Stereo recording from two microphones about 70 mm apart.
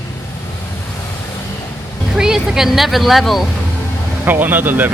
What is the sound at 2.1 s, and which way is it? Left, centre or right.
Speech, centre.